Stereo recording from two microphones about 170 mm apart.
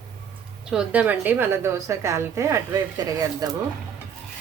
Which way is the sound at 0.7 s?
5° right (ahead or behind).